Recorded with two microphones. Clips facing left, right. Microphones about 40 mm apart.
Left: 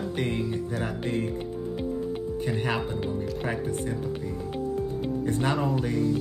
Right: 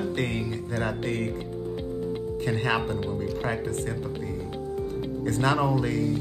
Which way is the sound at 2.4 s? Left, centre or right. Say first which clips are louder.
Right 2 dB; right.